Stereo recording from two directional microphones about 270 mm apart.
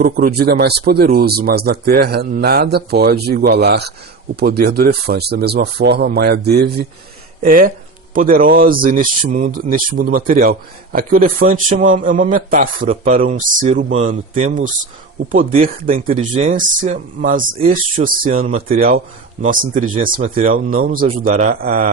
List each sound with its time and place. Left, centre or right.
0.0 s speech: right